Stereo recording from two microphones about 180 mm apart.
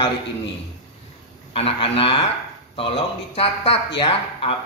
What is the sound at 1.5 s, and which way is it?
Speech, 30° left (ahead or behind).